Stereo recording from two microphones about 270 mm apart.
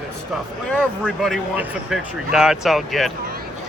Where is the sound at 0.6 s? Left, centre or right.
Centre.